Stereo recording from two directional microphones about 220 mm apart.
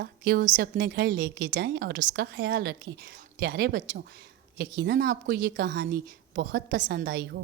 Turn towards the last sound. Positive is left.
turn(degrees=-50)  # may be behind; listen again after turning